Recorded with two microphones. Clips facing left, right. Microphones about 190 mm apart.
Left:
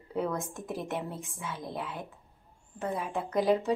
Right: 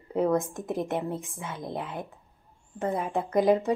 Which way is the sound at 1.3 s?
55° right (ahead or behind).